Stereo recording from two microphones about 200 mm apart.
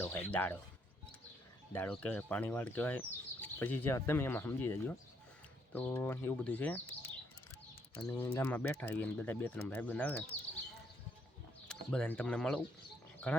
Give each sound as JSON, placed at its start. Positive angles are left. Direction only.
{"t": 0.0, "sound": "a sound", "side_deg": 10}
{"t": 1.7, "sound": "speech", "side_deg": 5}
{"t": 7.9, "sound": "speech", "side_deg": 10}
{"t": 11.7, "sound": "speech", "side_deg": 5}